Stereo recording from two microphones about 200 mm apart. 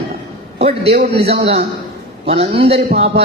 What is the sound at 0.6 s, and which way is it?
A man's voice, 30° right (ahead or behind).